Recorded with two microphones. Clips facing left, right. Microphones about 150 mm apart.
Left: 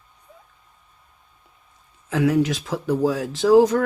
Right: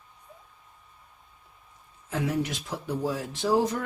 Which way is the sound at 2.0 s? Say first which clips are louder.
Left 9 dB; 90° left.